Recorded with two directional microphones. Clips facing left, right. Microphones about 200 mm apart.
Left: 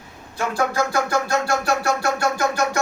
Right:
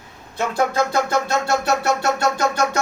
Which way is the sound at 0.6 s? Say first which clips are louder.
Right 2 dB; 25° right (ahead or behind).